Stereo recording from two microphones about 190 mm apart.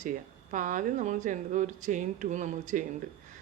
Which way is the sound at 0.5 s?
45° right (ahead or behind).